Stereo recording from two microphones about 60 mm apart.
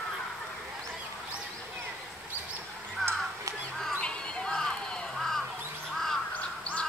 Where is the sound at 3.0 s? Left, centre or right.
Centre.